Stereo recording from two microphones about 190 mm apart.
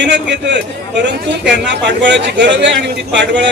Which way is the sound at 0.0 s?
65° right (ahead or behind).